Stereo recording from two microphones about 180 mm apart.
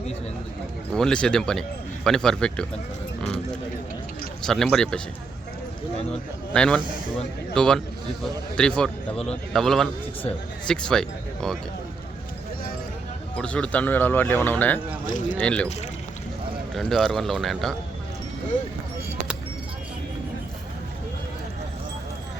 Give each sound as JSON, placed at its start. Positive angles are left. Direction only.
{"t": 0.9, "sound": "speech", "side_deg": 5}
{"t": 4.4, "sound": "speech", "side_deg": 5}
{"t": 6.1, "sound": "speech", "side_deg": 5}
{"t": 13.3, "sound": "speech", "side_deg": 5}
{"t": 15.0, "sound": "speech", "side_deg": 45}
{"t": 15.4, "sound": "speech", "side_deg": 5}
{"t": 16.7, "sound": "speech", "side_deg": 0}